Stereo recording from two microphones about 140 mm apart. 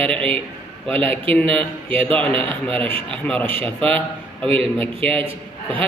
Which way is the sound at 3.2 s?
10° left (ahead or behind).